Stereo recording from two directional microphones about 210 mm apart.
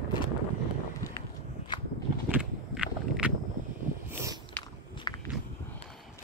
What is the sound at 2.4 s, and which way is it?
Walk, 5° right (ahead or behind).